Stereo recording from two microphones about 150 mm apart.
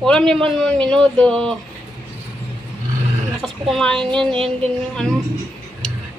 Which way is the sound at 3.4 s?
Centre (ahead or behind).